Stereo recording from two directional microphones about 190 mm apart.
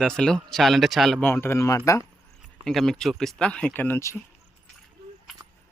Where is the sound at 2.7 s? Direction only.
Centre (ahead or behind).